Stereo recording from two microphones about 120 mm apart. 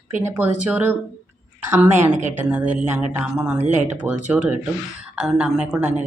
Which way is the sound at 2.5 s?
10° right (ahead or behind).